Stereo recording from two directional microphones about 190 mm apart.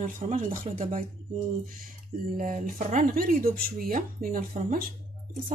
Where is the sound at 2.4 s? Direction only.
45° right (ahead or behind).